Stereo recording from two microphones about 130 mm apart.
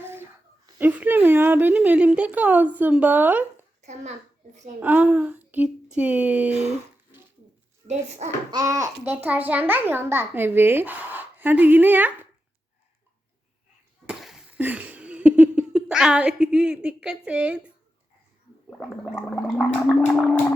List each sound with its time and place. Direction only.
0.0 s a sound: 20° right (ahead or behind)
0.8 s a child's voice: 15° right (ahead or behind)
3.8 s a sound: 60° right (ahead or behind)
4.8 s a child's voice: 10° right (ahead or behind)
7.9 s a child's voice: 60° right (ahead or behind)
8.4 s a child's voice: 25° right (ahead or behind)
9.2 s a child's voice: 10° right (ahead or behind)
14.1 s a sound: centre (ahead or behind)
14.6 s speech: 15° right (ahead or behind)
18.8 s gargling: 5° right (ahead or behind)